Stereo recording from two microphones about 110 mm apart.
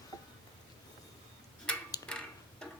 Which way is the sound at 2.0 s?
10° left (ahead or behind).